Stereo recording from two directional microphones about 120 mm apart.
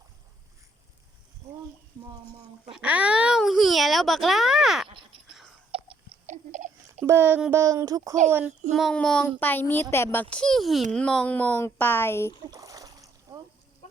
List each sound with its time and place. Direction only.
2.7 s a child's voice: 10° right (ahead or behind)
4.9 s a sound: 45° right (ahead or behind)
6.2 s a sound: 85° right
7.0 s a child's voice: 20° right (ahead or behind)
8.3 s a child's voice: 15° right (ahead or behind)
8.7 s a child's voice: centre (ahead or behind); by 12.3 s 20° left (ahead or behind)
12.5 s splash: 30° right (ahead or behind)